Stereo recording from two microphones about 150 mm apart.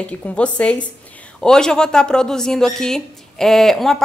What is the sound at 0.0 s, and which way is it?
A woman's voice, 10° left (ahead or behind).